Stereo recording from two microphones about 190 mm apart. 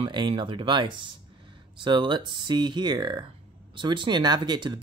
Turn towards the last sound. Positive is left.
turn(degrees=-25)  # may be behind; listen again after turning